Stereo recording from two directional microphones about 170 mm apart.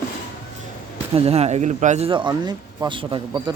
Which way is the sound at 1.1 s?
40° right (ahead or behind).